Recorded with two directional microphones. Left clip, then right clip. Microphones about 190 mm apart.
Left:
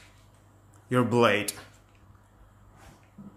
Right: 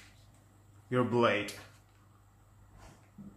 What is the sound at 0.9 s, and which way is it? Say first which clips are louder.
Speech: left 6 dB; 60° left (ahead or behind).